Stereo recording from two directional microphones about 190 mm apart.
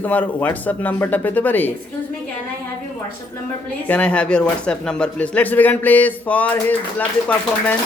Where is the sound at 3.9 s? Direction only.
5° left (ahead or behind).